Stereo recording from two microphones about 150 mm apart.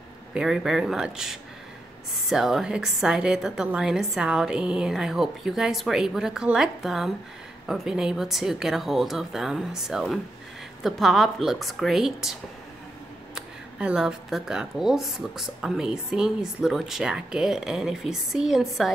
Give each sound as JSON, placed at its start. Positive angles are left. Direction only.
{"t": 0.3, "sound": "speech", "side_deg": -5}